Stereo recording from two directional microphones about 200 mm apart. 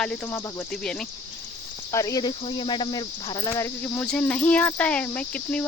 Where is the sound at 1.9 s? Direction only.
15° left (ahead or behind).